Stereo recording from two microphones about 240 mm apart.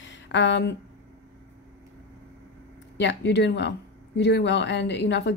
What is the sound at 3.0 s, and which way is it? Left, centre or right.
Speech, left.